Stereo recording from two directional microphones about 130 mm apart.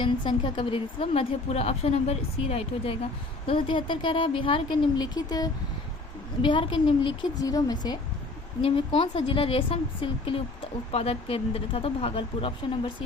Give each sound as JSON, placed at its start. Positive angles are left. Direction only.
{"t": 0.0, "sound": "a woman's voice", "side_deg": 40}
{"t": 6.4, "sound": "a woman's voice", "side_deg": 40}
{"t": 7.3, "sound": "speech", "side_deg": 30}
{"t": 8.6, "sound": "a woman's voice", "side_deg": 40}